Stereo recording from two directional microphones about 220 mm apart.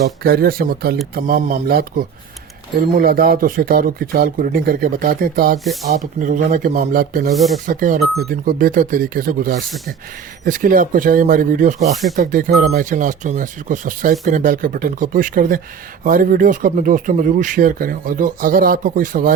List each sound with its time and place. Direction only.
0.0 s speech: 45° right (ahead or behind)
7.3 s speech: centre (ahead or behind)
7.7 s speech: 35° right (ahead or behind)